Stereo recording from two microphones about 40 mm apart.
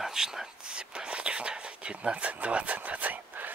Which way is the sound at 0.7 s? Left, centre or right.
Right.